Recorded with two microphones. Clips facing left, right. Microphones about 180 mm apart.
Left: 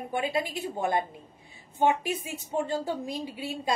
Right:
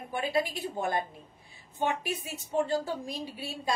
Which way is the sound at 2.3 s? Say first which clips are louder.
Right 4 dB; 20° left (ahead or behind).